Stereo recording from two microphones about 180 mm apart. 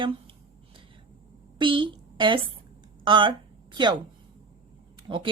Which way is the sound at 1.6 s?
30° right (ahead or behind).